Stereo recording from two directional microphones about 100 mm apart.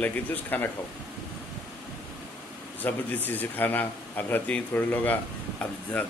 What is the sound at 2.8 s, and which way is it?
A man's voice, 20° left (ahead or behind).